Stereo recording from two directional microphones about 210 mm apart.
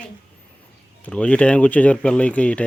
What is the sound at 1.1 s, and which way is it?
Speech, 5° left (ahead or behind).